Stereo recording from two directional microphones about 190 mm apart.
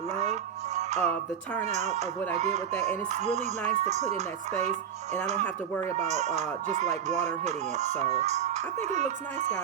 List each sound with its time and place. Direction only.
0.9 s music: 10° left (ahead or behind)
1.6 s music: 35° right (ahead or behind)
6.0 s music: 35° right (ahead or behind)